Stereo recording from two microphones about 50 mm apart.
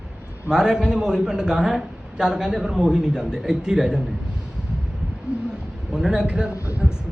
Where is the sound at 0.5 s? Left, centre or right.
Centre.